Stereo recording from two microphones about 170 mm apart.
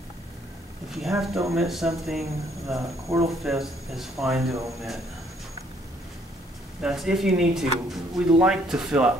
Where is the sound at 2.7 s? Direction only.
20° right (ahead or behind).